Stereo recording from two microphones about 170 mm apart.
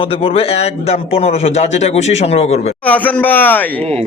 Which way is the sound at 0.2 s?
35° left (ahead or behind).